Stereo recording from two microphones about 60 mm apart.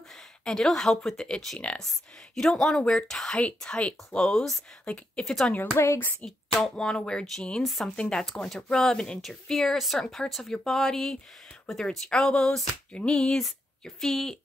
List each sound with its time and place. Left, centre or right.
0.5 s speech: centre
2.8 s speech: centre
3.1 s speech: centre
3.3 s speech: centre
5.2 s speech: centre
6.5 s speech: centre
7.6 s speech: centre
7.9 s speech: centre
13.3 s speech: centre